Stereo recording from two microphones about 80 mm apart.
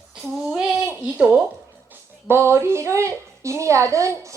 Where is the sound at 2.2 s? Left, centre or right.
Right.